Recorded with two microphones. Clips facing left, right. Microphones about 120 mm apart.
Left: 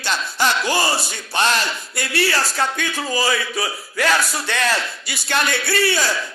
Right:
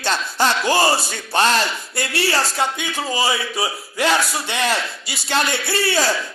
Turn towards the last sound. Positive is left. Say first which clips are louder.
# even
turn(degrees=-30)  # may be behind; listen again after turning